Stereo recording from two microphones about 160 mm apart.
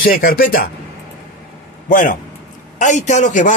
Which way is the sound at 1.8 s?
60° left (ahead or behind).